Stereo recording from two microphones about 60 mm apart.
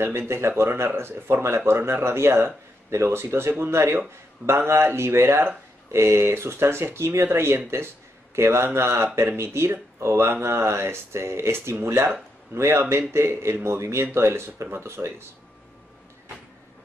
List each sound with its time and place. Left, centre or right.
0.3 s speech: right